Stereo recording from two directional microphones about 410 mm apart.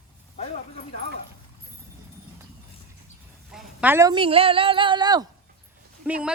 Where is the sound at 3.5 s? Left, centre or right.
Centre.